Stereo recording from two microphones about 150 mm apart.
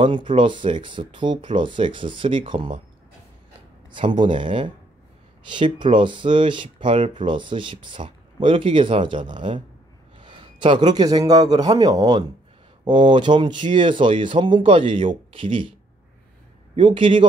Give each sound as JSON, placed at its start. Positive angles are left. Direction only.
{"t": 0.0, "sound": "speech", "side_deg": -35}
{"t": 3.9, "sound": "a man's voice", "side_deg": -35}
{"t": 16.7, "sound": "speech", "side_deg": -35}